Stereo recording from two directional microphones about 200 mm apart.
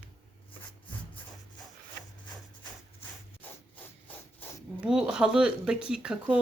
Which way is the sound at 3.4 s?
10° left (ahead or behind).